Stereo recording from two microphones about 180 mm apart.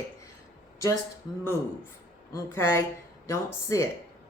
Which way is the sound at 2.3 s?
15° left (ahead or behind).